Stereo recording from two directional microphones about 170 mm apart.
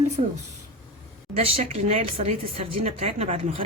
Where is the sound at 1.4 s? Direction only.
40° right (ahead or behind).